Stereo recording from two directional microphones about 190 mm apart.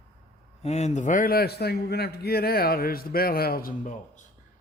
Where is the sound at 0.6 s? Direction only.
35° left (ahead or behind).